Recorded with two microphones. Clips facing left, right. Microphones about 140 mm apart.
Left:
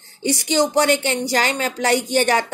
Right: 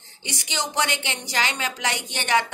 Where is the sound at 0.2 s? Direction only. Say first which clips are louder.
Left 12 dB; 45° left (ahead or behind).